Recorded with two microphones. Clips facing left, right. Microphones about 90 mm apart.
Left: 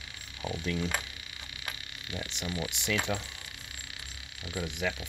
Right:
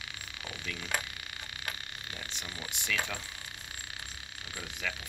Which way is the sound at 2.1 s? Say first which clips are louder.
Left 9 dB; 20° left (ahead or behind).